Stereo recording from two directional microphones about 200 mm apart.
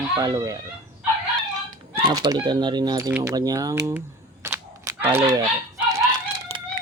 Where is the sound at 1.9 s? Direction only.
20° right (ahead or behind).